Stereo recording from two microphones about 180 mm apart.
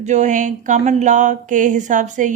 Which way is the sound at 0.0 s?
40° right (ahead or behind).